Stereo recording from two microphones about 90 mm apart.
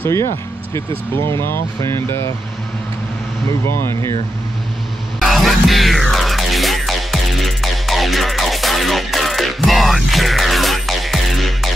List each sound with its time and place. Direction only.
0.0 s speech: 30° left (ahead or behind)
3.6 s speech: 30° left (ahead or behind)
5.2 s music: centre (ahead or behind)